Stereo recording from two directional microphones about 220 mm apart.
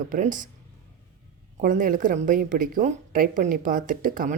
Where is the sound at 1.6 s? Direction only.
35° right (ahead or behind).